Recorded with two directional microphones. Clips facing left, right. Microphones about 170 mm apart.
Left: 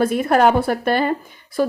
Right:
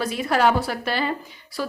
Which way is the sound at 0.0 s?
50° left (ahead or behind).